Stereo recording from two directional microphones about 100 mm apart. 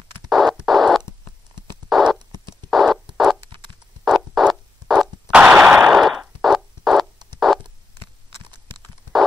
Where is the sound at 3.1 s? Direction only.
5° right (ahead or behind).